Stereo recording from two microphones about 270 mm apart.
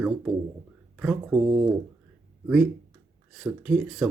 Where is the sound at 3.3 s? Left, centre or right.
Centre.